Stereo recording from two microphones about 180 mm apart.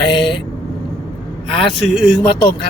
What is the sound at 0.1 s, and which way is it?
Vehicle, 25° left (ahead or behind).